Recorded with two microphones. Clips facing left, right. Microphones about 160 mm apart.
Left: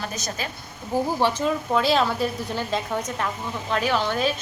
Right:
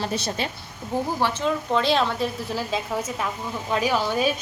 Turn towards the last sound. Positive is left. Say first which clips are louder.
# right 1 dB
turn(degrees=-10)  # may be behind; listen again after turning